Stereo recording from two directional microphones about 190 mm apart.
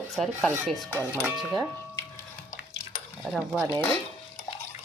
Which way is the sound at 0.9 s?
10° right (ahead or behind).